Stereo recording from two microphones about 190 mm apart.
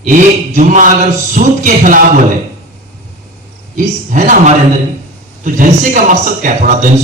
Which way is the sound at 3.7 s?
40° right (ahead or behind).